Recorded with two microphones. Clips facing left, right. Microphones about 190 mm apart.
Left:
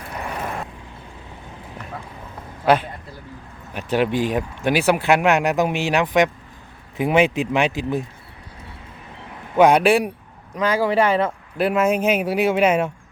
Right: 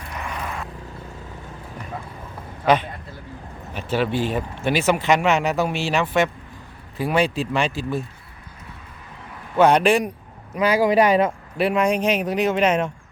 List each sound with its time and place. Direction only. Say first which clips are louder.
0.2 s vehicle: left 3 dB; 40° left (ahead or behind)
3.8 s speech: left 2 dB; 15° left (ahead or behind)
9.6 s speech: left 2 dB; 10° left (ahead or behind)
10.5 s speech: right 2 dB; 10° right (ahead or behind)
11.5 s speech: left 2 dB; centre (ahead or behind)